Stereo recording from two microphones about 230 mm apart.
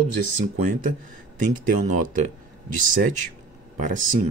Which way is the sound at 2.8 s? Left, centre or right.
Right.